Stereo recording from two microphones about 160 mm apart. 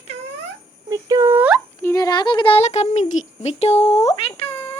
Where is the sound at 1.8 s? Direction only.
20° left (ahead or behind).